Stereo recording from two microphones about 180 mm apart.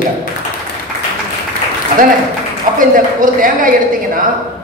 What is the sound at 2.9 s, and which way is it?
Speech, 50° right (ahead or behind).